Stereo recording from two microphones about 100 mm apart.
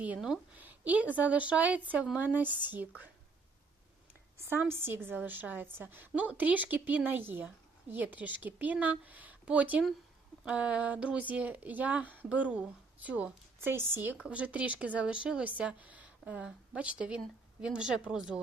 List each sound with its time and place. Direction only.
0.5 s a woman's voice: 15° right (ahead or behind)
4.4 s a woman's voice: 25° right (ahead or behind); by 18.3 s 5° right (ahead or behind)